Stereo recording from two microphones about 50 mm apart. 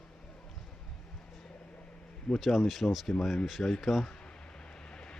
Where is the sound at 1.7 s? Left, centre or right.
Centre.